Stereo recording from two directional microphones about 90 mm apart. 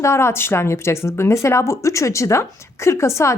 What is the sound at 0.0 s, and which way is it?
Speech, 30° left (ahead or behind).